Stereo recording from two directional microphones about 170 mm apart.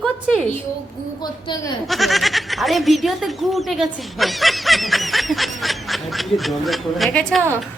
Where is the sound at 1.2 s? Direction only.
25° left (ahead or behind).